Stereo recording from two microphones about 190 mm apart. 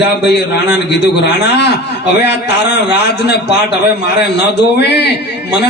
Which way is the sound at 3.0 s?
60° left (ahead or behind).